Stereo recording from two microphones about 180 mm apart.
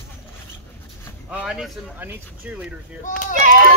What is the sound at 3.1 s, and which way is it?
Speech, 45° left (ahead or behind).